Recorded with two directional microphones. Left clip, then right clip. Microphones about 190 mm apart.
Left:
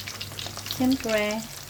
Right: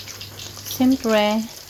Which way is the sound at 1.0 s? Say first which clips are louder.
Right 8 dB; 35° right (ahead or behind).